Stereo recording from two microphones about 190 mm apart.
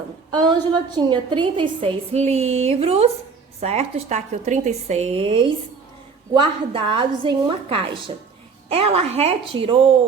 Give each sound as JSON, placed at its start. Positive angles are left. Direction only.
{"t": 0.4, "sound": "a woman's voice", "side_deg": -20}